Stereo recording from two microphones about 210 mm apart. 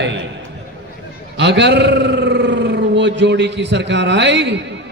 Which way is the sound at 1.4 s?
55° right (ahead or behind).